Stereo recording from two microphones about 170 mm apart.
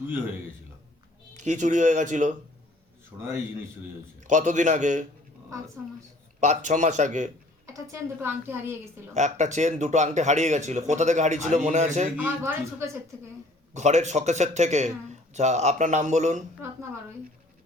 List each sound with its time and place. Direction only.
1.4 s speech: 45° right (ahead or behind)
3.2 s a woman's voice: 15° right (ahead or behind)
4.2 s speech: 45° right (ahead or behind)
6.4 s speech: 45° right (ahead or behind)
7.7 s a woman's voice: 15° right (ahead or behind)
9.1 s speech: 45° right (ahead or behind)
12.1 s a woman's voice: 10° right (ahead or behind)
13.7 s speech: 45° right (ahead or behind)